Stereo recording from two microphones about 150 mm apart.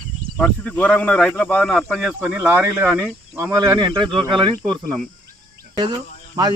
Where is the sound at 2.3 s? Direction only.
10° right (ahead or behind).